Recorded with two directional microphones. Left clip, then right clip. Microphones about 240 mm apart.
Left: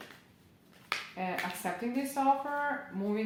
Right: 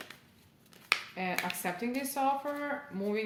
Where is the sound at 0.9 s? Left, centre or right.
Right.